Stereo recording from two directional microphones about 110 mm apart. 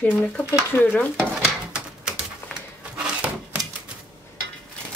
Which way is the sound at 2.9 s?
10° right (ahead or behind).